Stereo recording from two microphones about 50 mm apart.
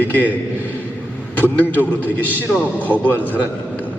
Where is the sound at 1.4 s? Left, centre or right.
Left.